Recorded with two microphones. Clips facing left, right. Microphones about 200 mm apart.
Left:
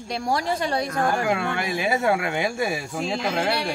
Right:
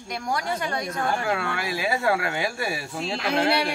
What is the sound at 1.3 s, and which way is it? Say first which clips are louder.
Speech: left 2 dB; 20° left (ahead or behind).